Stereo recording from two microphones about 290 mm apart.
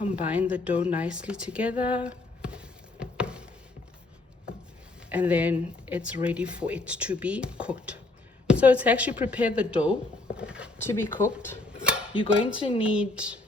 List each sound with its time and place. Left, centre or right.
0.1 s speech: centre
0.9 s a sound: centre
5.0 s a woman's voice: centre
10.3 s a sound: centre
10.8 s cutlery: centre
12.8 s speech: centre